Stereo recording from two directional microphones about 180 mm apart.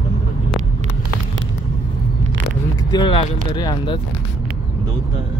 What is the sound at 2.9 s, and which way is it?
Speech, 30° left (ahead or behind).